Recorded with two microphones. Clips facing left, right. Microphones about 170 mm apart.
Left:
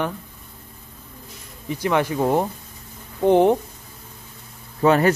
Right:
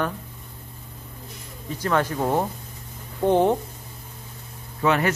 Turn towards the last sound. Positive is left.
turn(degrees=35)  # may be behind; listen again after turning